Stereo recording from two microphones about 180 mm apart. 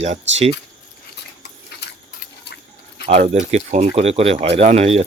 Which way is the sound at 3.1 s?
40° right (ahead or behind).